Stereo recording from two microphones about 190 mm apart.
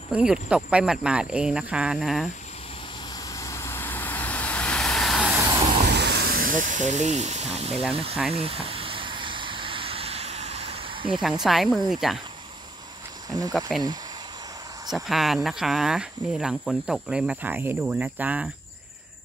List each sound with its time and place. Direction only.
0.1 s speech: 5° right (ahead or behind)
3.3 s vehicle: 15° left (ahead or behind); by 5.4 s centre (ahead or behind)
5.9 s a sound: 60° right (ahead or behind)
6.6 s speech: 40° right (ahead or behind)
8.3 s a sound: 30° right (ahead or behind)
11.4 s speech: centre (ahead or behind)
13.5 s speech: centre (ahead or behind)
14.9 s speech: centre (ahead or behind)